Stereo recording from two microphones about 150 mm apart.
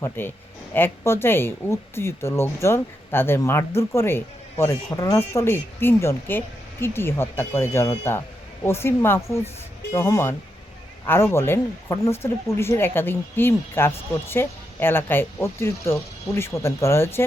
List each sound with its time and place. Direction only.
0.0 s speech: 15° left (ahead or behind)